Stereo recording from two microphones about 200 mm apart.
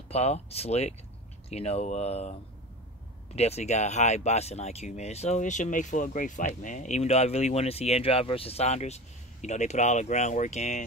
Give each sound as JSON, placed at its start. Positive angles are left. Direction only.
{"t": 0.1, "sound": "speech", "side_deg": 30}
{"t": 3.3, "sound": "speech", "side_deg": 30}